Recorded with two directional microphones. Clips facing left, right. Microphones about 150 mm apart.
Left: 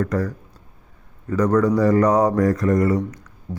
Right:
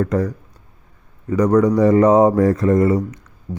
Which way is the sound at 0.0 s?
20° right (ahead or behind).